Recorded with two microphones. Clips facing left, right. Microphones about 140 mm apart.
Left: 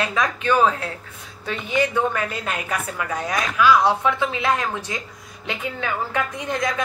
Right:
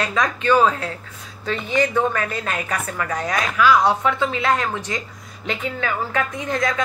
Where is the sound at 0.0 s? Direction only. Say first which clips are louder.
Right 1 dB; 15° left (ahead or behind).